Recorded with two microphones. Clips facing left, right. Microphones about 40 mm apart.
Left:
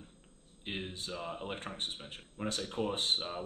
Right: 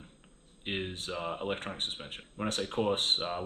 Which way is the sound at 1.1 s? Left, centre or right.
Right.